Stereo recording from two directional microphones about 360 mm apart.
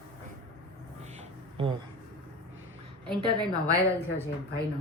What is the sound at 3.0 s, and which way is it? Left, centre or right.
Speech, centre.